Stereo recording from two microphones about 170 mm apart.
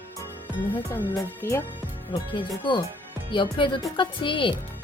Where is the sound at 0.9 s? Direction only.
15° left (ahead or behind).